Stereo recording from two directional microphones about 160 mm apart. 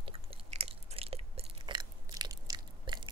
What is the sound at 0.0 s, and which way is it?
Chewing, 35° right (ahead or behind).